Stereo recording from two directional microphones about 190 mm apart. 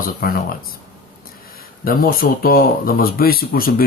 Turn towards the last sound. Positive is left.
turn(degrees=50)  # may be behind; listen again after turning